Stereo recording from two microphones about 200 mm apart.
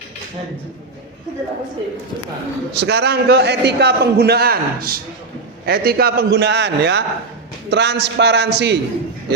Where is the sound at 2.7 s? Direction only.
55° right (ahead or behind).